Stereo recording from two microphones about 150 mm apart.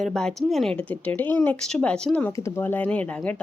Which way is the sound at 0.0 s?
5° left (ahead or behind).